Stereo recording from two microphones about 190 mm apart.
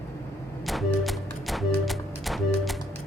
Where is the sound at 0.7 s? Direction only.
Centre (ahead or behind).